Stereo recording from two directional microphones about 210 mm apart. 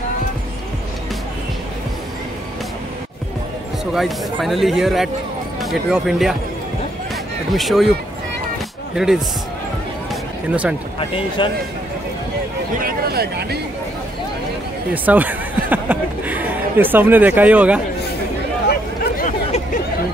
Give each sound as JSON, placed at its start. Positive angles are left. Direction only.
{"t": 3.9, "sound": "speech", "side_deg": 0}
{"t": 7.5, "sound": "speech", "side_deg": 0}
{"t": 8.9, "sound": "speech", "side_deg": 0}
{"t": 10.5, "sound": "speech", "side_deg": -5}
{"t": 11.0, "sound": "speech", "side_deg": 25}
{"t": 12.7, "sound": "speech", "side_deg": -45}
{"t": 15.0, "sound": "a sound", "side_deg": -10}
{"t": 18.7, "sound": "a sound", "side_deg": 40}